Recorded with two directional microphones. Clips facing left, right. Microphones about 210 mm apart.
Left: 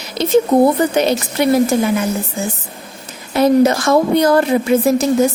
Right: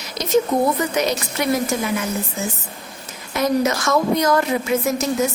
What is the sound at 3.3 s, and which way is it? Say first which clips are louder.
Speech: left 7 dB; 30° left (ahead or behind).